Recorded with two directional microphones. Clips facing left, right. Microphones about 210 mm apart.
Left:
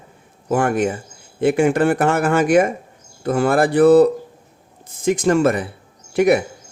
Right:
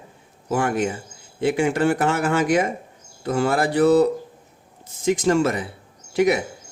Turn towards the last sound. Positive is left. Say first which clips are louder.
# left 4 dB
turn(degrees=55)  # may be behind; listen again after turning